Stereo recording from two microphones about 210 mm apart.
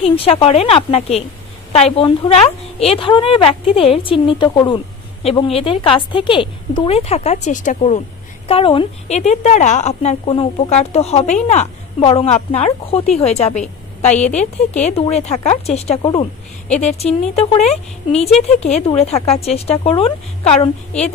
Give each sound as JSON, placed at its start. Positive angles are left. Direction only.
{"t": 0.0, "sound": "a woman's voice", "side_deg": 25}
{"t": 16.6, "sound": "speech", "side_deg": 5}
{"t": 17.3, "sound": "a woman's voice", "side_deg": 30}